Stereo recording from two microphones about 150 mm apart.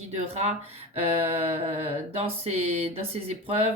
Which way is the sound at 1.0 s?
45° right (ahead or behind).